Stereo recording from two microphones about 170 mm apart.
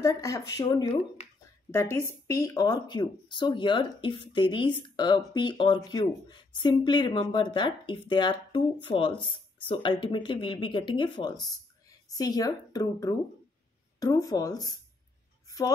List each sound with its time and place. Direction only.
0.0 s speech: 20° left (ahead or behind)